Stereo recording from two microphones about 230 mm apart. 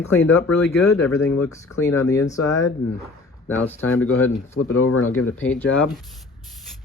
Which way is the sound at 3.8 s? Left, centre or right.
Left.